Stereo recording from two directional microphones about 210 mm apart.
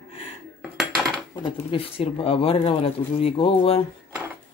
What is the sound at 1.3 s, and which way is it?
Speech, 25° left (ahead or behind).